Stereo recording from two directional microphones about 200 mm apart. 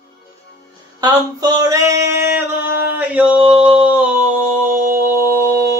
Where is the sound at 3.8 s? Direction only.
5° right (ahead or behind).